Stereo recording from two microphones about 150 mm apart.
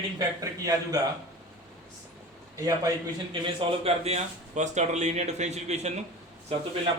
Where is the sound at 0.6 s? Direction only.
25° right (ahead or behind).